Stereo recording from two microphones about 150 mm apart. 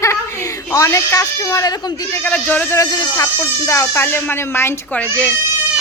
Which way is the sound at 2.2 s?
10° left (ahead or behind).